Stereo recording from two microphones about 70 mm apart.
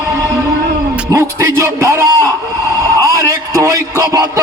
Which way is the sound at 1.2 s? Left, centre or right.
Right.